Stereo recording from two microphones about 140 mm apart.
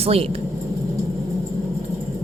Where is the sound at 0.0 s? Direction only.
45° right (ahead or behind).